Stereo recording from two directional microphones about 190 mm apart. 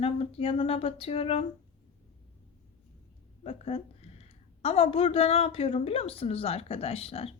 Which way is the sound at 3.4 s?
30° left (ahead or behind).